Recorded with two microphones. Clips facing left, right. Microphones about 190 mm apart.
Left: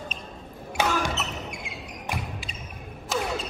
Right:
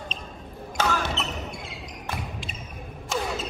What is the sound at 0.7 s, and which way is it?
Basketball bounce, 15° left (ahead or behind).